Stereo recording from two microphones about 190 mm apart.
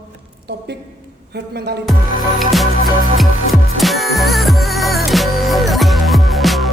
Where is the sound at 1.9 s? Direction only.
Centre (ahead or behind).